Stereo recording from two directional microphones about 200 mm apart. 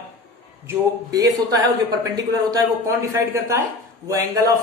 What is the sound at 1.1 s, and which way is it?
Speech, 15° right (ahead or behind).